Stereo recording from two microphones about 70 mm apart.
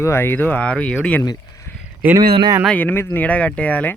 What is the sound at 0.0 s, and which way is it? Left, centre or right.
Speech, left.